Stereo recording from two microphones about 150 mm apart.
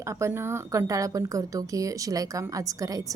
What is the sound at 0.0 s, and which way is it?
Speech, 20° right (ahead or behind).